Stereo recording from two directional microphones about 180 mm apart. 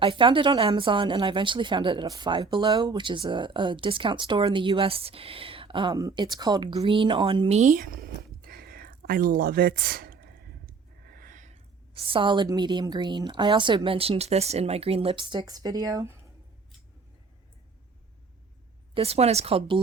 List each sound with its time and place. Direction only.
0.0 s a woman's voice: 30° right (ahead or behind)
18.9 s speech: 35° right (ahead or behind)